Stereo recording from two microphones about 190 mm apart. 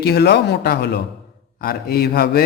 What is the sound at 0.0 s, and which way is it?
A man's voice, 55° left (ahead or behind).